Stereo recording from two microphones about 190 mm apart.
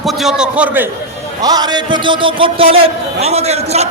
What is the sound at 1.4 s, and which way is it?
A man's voice, 20° right (ahead or behind).